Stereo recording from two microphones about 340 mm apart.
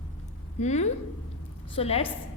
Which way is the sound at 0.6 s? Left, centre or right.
Centre.